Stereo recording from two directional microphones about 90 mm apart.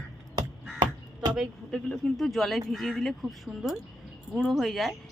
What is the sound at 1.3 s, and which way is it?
A woman's voice, 5° right (ahead or behind).